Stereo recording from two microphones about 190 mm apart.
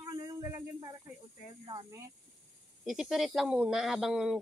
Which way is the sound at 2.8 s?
Centre (ahead or behind).